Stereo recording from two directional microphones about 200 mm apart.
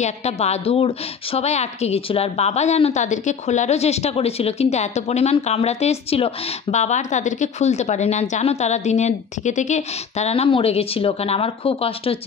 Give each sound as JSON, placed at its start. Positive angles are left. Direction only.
{"t": 0.0, "sound": "a woman's voice", "side_deg": 35}